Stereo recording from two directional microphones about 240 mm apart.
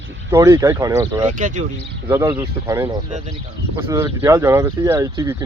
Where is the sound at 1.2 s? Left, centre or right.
Right.